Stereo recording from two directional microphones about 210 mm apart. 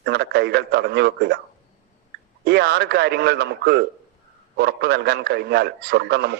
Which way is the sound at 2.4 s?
50° right (ahead or behind).